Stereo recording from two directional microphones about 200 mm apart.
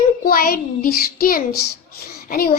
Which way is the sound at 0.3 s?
45° left (ahead or behind).